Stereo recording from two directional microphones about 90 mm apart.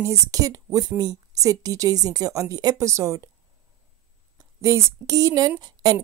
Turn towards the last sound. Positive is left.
turn(degrees=-45)  # may be behind; listen again after turning